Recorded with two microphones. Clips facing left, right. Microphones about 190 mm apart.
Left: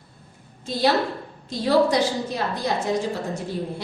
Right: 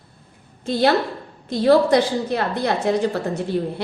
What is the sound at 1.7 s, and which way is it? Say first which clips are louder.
A woman's voice: right 4 dB; 60° right (ahead or behind).